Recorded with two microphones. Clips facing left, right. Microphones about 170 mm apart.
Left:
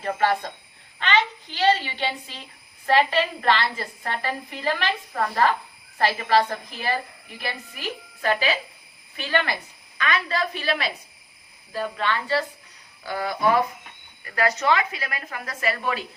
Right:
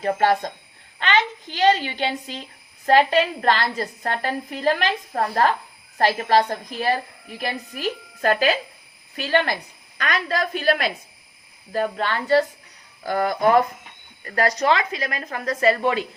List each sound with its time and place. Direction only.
0.0 s a woman's voice: 40° right (ahead or behind)
1.5 s a woman's voice: 45° right (ahead or behind)